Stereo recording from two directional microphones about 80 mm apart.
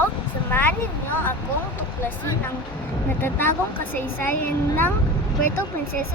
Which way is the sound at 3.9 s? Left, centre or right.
Left.